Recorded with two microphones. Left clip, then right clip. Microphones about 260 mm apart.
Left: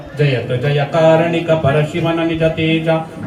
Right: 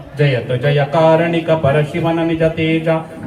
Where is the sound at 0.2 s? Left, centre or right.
Centre.